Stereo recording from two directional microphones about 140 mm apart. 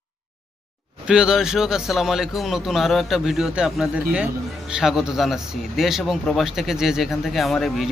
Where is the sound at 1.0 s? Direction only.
5° right (ahead or behind).